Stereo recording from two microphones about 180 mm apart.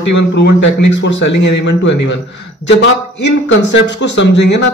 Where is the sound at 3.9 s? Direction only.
80° left.